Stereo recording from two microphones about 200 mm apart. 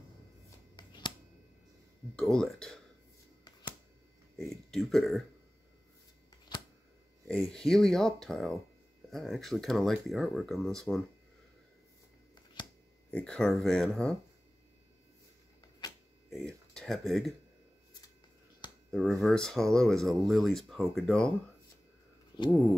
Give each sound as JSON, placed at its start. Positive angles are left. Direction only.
{"t": 0.7, "sound": "shuffling cards", "side_deg": 20}
{"t": 2.1, "sound": "speech", "side_deg": 0}
{"t": 4.4, "sound": "speech", "side_deg": 0}
{"t": 7.2, "sound": "speech", "side_deg": 5}
{"t": 13.1, "sound": "speech", "side_deg": 5}
{"t": 16.3, "sound": "a sound", "side_deg": 0}
{"t": 18.9, "sound": "speech", "side_deg": 0}
{"t": 22.3, "sound": "a sound", "side_deg": 20}